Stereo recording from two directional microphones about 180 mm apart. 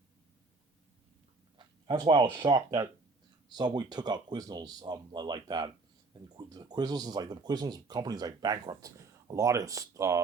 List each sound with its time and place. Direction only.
1.5 s speech: 25° right (ahead or behind)